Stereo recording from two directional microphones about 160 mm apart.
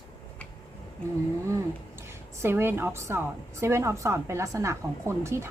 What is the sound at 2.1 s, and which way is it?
A woman's voice, 15° right (ahead or behind).